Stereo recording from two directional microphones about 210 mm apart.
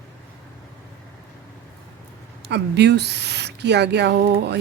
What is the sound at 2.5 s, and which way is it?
Speech, 55° right (ahead or behind).